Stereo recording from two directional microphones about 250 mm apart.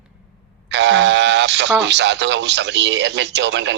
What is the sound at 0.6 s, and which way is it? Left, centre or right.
Speech, right.